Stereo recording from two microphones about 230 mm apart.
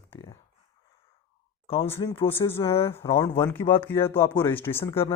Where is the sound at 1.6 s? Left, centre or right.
Left.